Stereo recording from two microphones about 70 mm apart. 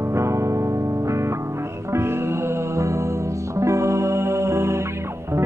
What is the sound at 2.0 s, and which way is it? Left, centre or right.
Music, right.